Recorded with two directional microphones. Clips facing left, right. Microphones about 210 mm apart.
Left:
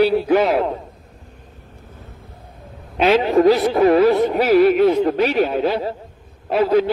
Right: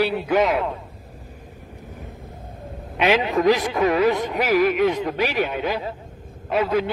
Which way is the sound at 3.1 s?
35° left (ahead or behind).